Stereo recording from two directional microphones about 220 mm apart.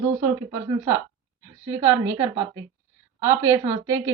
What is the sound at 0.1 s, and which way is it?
A woman's voice, 10° right (ahead or behind).